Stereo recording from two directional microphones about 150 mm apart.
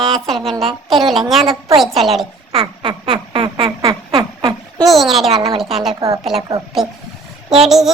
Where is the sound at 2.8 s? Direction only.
30° right (ahead or behind).